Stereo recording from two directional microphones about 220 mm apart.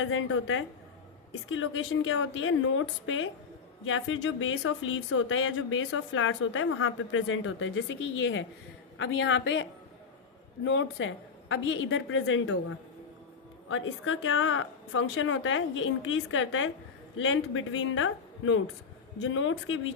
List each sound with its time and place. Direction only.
0.0 s speech: 65° left (ahead or behind)
14.0 s speech: 60° left (ahead or behind)